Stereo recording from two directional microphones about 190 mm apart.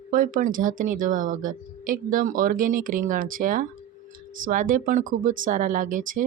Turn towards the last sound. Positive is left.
turn(degrees=-45)  # may be behind; listen again after turning